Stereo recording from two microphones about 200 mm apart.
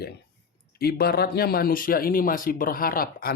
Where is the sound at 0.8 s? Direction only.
50° left (ahead or behind).